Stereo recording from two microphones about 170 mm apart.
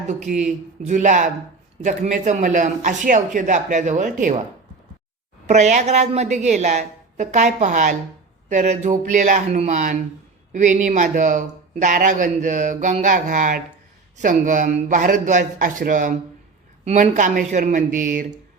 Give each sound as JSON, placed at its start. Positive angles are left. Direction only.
{"t": 0.1, "sound": "speech", "side_deg": -45}
{"t": 5.5, "sound": "speech", "side_deg": -45}